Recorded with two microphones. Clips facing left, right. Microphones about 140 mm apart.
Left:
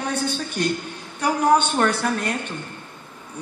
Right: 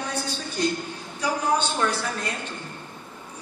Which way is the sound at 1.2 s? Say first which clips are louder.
Left 6 dB; 60° left (ahead or behind).